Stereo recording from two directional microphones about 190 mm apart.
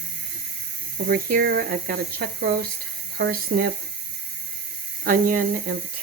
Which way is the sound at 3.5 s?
45° right (ahead or behind).